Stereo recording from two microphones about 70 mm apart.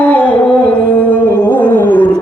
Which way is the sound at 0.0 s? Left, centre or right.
Centre.